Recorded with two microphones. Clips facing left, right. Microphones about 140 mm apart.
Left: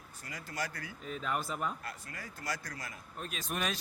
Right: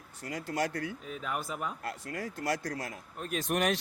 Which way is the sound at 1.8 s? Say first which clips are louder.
Right 8 dB; 75° right (ahead or behind).